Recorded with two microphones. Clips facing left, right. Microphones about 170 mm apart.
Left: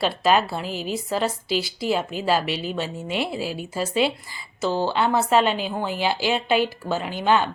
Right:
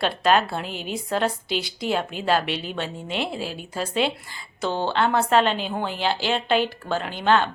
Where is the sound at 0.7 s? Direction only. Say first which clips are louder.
Left 3 dB; 40° left (ahead or behind).